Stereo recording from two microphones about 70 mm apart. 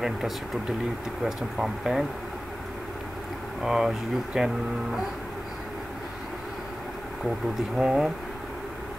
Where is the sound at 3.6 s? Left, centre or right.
Centre.